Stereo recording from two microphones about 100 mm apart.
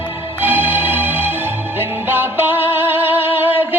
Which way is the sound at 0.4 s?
20° right (ahead or behind).